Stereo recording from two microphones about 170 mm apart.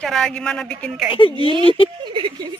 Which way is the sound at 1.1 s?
30° left (ahead or behind).